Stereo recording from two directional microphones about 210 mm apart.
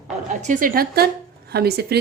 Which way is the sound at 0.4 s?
40° right (ahead or behind).